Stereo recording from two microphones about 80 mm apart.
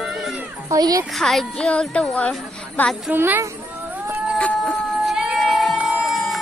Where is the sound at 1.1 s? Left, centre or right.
Centre.